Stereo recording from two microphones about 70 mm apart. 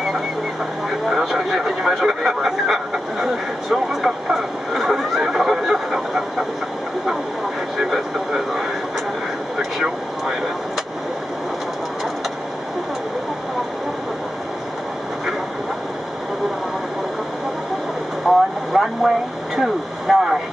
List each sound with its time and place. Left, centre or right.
0.8 s vehicle: centre
3.7 s a sound: centre
7.9 s vehicle: centre
18.3 s vehicle: centre